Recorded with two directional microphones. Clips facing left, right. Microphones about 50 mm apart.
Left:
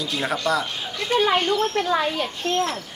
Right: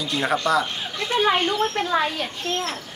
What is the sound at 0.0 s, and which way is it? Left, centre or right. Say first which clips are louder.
Speech: right 2 dB; centre.